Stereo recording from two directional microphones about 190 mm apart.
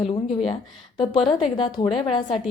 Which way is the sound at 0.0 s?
30° left (ahead or behind).